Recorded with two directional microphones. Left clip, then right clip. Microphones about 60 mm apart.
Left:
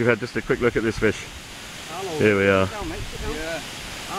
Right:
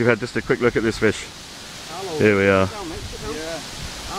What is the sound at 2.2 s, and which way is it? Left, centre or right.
Speech, right.